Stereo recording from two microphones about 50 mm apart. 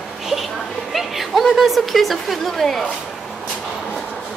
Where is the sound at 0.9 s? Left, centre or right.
Centre.